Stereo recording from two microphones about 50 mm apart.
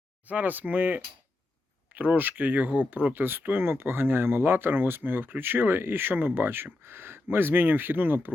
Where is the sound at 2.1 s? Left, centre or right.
Right.